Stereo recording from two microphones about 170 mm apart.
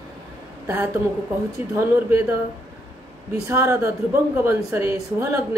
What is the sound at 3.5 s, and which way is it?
A woman's voice, 15° right (ahead or behind).